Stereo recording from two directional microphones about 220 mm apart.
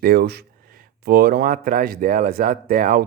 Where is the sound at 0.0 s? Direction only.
45° right (ahead or behind).